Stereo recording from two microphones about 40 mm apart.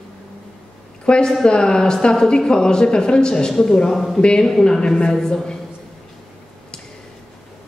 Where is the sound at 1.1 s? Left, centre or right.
Centre.